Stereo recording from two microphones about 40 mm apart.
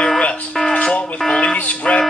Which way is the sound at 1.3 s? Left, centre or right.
Centre.